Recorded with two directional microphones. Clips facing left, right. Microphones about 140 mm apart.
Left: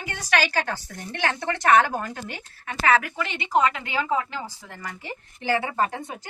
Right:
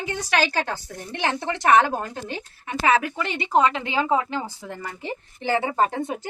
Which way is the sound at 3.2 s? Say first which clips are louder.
Right 4 dB; 35° right (ahead or behind).